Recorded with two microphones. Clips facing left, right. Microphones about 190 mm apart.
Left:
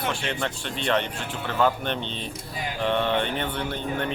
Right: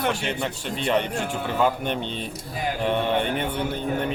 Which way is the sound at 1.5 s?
10° right (ahead or behind).